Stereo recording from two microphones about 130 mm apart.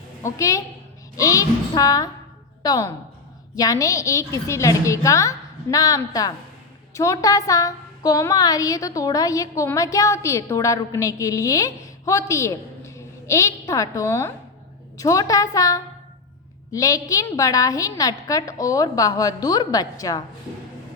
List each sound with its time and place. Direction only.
0.2 s a woman's voice: 25° left (ahead or behind)